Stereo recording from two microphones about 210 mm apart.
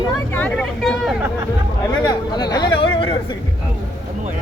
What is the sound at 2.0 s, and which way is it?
Chatter, 20° left (ahead or behind).